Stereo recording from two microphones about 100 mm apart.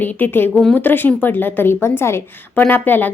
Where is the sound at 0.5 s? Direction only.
5° left (ahead or behind).